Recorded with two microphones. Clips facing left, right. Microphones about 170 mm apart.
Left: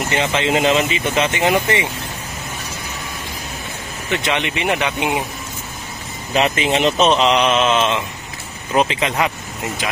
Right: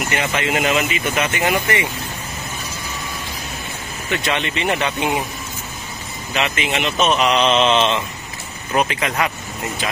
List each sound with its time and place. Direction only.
0.1 s speech: 20° left (ahead or behind)
4.1 s speech: 20° left (ahead or behind)
6.3 s speech: 35° left (ahead or behind)
7.3 s speech: 5° left (ahead or behind)
8.7 s speech: 20° left (ahead or behind)